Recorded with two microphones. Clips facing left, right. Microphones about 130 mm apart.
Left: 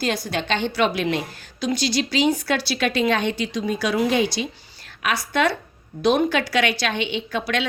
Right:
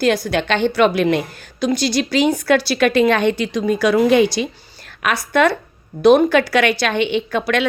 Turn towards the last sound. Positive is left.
turn(degrees=-55)  # may be behind; listen again after turning